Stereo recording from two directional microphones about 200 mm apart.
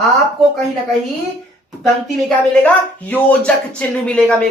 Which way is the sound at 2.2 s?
5° left (ahead or behind).